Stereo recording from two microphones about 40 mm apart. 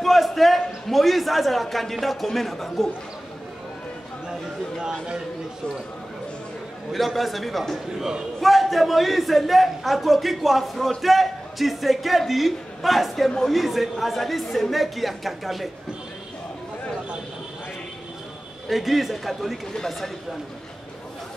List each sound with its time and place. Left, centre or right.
0.0 s a man's voice: centre
4.3 s speech: centre
7.2 s a man's voice: centre
18.7 s a man's voice: centre